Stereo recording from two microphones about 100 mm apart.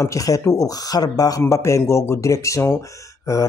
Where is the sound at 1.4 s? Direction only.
25° left (ahead or behind).